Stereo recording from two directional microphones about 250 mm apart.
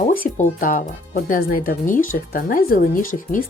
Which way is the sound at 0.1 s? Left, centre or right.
Left.